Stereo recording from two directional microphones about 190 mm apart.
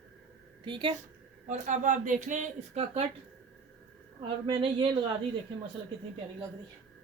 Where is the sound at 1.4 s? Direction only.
40° right (ahead or behind).